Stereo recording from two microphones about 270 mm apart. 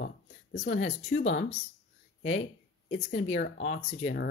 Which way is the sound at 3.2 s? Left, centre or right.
Left.